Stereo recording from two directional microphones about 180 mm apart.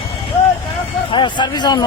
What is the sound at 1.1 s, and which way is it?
Speech, 25° left (ahead or behind).